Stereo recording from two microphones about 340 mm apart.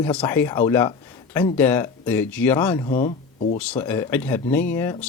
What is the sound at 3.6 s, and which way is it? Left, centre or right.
Speech, centre.